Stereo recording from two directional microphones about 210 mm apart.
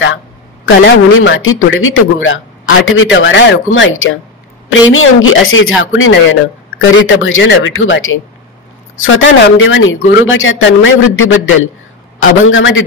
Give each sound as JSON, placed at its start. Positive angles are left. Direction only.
{"t": 0.7, "sound": "a man's voice", "side_deg": 60}